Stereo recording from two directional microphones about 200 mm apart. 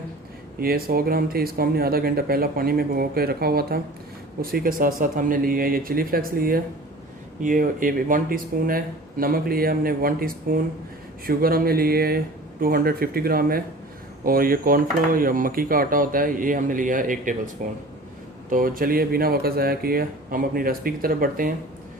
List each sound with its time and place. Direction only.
0.6 s speech: 50° right (ahead or behind)